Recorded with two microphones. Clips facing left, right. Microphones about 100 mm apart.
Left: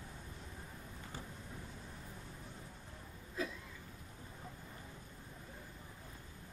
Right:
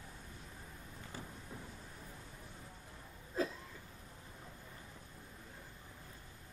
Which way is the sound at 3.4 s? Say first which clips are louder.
Right 4 dB; 35° right (ahead or behind).